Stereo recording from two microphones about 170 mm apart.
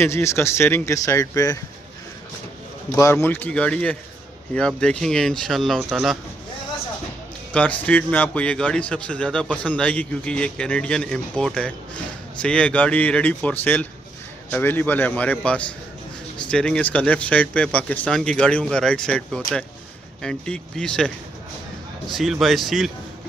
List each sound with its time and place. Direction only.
0.0 s a man's voice: 15° left (ahead or behind)
3.0 s a man's voice: 15° left (ahead or behind)
7.5 s a man's voice: 10° left (ahead or behind)